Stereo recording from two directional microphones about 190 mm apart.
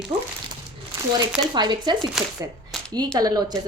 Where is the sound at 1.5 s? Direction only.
25° right (ahead or behind).